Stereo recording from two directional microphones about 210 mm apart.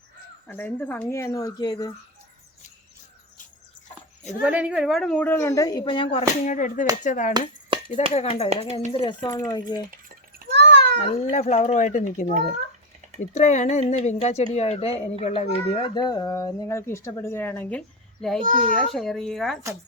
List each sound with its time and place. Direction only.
0.4 s speech: 10° left (ahead or behind)
4.4 s speech: 5° right (ahead or behind); by 7.3 s 35° left (ahead or behind)
7.7 s dishes: 25° right (ahead or behind)
8.1 s speech: 30° left (ahead or behind)
10.5 s a sound: 55° right (ahead or behind)
11.0 s speech: 35° left (ahead or behind)
13.3 s speech: 35° left (ahead or behind); by 18.3 s 5° left (ahead or behind)
18.4 s a child's voice: 40° right (ahead or behind)
18.9 s speech: centre (ahead or behind)